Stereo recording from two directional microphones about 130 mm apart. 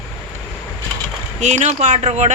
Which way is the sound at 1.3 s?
65° right (ahead or behind).